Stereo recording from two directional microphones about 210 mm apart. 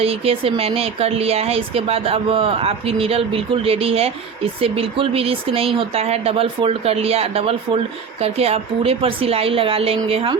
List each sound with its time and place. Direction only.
0.0 s speech: 25° right (ahead or behind)